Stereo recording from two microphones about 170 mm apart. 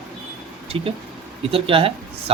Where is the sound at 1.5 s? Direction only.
35° right (ahead or behind).